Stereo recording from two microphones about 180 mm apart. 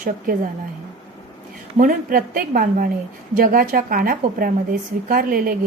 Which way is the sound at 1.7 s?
50° right (ahead or behind).